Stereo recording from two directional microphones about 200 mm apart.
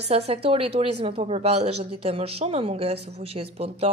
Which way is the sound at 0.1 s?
30° right (ahead or behind).